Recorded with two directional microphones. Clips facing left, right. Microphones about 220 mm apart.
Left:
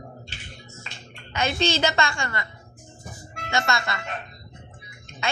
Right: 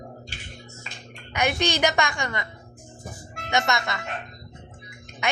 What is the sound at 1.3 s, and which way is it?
A woman's voice, 15° right (ahead or behind).